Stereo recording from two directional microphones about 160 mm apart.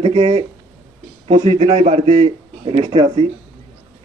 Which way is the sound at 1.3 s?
45° right (ahead or behind).